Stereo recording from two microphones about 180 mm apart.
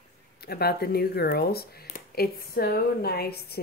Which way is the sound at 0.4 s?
60° left (ahead or behind).